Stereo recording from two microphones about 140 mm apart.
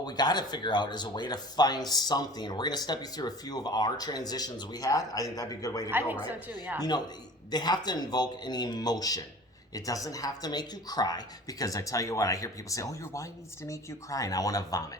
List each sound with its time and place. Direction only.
0.0 s speech: 30° left (ahead or behind)
5.9 s speech: 15° right (ahead or behind)
7.5 s speech: 30° left (ahead or behind)